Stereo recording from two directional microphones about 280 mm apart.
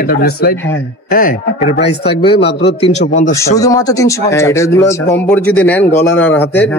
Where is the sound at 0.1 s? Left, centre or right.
Left.